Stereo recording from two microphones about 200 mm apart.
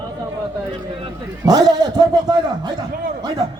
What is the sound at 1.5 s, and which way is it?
A man's voice, 20° right (ahead or behind).